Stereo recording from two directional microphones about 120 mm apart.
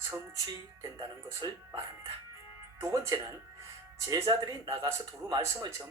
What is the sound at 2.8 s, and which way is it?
Speech, 30° right (ahead or behind).